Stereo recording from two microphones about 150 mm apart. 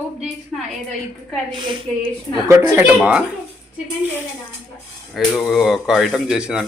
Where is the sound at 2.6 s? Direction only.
10° right (ahead or behind).